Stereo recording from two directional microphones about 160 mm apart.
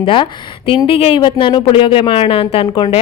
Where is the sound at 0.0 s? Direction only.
35° left (ahead or behind).